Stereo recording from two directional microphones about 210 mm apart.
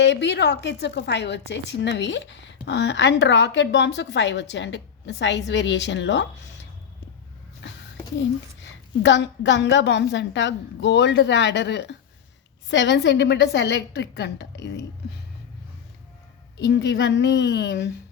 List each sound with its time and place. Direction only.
0.0 s a woman's voice: 55° left (ahead or behind)
8.6 s a woman's voice: 55° left (ahead or behind)
16.6 s a woman's voice: 55° left (ahead or behind)